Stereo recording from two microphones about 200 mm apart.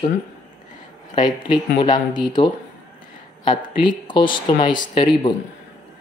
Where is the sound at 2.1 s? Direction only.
20° left (ahead or behind).